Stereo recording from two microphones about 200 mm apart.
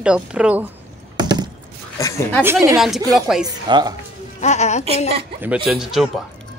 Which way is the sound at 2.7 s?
Centre (ahead or behind).